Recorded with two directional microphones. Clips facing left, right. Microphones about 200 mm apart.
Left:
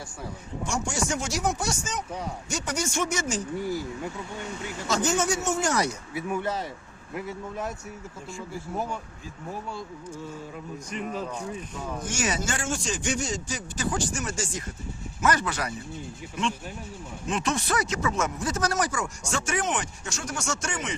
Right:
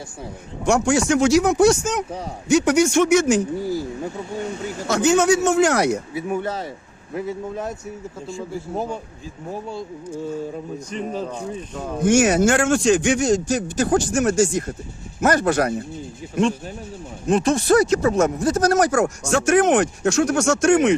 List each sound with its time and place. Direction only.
0.6 s speech: 70° right (ahead or behind)
3.6 s speech: 35° right (ahead or behind)
4.9 s speech: 65° right (ahead or behind)
6.1 s speech: 25° right (ahead or behind)
10.5 s speech: 30° right (ahead or behind)
12.0 s speech: 60° right (ahead or behind); by 13.3 s 75° right (ahead or behind)
13.7 s speech: 45° right (ahead or behind)
14.1 s speech: 70° right (ahead or behind)
15.2 s speech: 50° right (ahead or behind)
17.2 s speech: 35° right (ahead or behind)
18.8 s speech: 70° right (ahead or behind)
19.5 s speech: 55° right (ahead or behind)
20.0 s speech: 80° right; by 20.9 s 60° right (ahead or behind)